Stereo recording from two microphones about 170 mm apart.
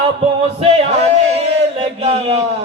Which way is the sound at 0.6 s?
35° right (ahead or behind).